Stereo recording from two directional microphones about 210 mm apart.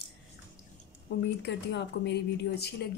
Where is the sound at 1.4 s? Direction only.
55° left (ahead or behind).